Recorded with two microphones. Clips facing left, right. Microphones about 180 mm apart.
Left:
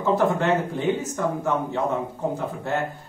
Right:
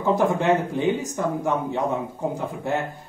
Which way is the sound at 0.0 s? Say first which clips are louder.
Right 1 dB; 15° right (ahead or behind).